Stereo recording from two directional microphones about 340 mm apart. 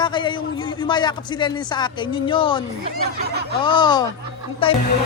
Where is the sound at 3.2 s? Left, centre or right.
Right.